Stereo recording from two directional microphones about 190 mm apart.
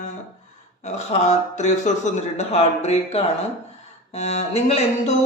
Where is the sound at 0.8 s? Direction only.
40° left (ahead or behind).